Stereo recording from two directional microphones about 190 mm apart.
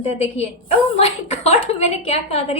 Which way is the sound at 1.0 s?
35° left (ahead or behind).